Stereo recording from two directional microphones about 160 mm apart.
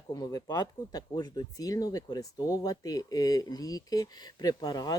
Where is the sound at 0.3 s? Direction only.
20° left (ahead or behind).